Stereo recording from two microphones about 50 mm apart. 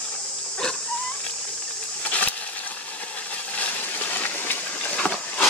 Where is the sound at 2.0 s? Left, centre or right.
Left.